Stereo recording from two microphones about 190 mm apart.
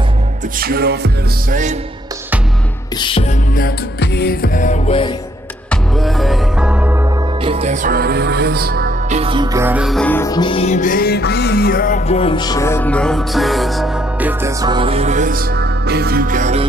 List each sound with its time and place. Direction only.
0.6 s music: 55° right (ahead or behind)
3.0 s music: 25° left (ahead or behind)
3.5 s music: 55° left (ahead or behind); by 4.9 s 40° left (ahead or behind)
5.7 s music: centre (ahead or behind)
7.4 s music: 35° right (ahead or behind); by 8.9 s 55° right (ahead or behind)
9.1 s music: 30° right (ahead or behind); by 12.0 s 50° left (ahead or behind)
12.1 s music: 30° left (ahead or behind); by 14.3 s centre (ahead or behind)
14.4 s music: 20° right (ahead or behind); by 16.6 s 40° right (ahead or behind)